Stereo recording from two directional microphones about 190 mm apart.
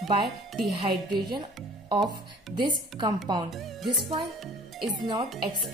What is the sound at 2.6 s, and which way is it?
Speech, 25° right (ahead or behind).